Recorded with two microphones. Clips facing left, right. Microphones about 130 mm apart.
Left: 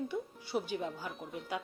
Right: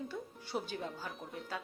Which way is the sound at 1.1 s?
Centre (ahead or behind).